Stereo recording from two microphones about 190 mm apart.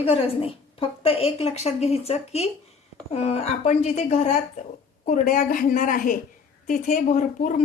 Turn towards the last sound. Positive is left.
turn(degrees=40)  # may be behind; listen again after turning